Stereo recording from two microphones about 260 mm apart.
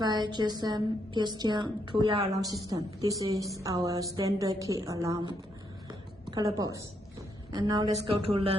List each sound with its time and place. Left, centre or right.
0.0 s a woman's voice: centre
6.3 s a woman's voice: centre